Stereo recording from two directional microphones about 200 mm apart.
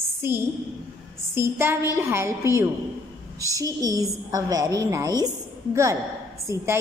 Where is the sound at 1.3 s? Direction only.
10° right (ahead or behind).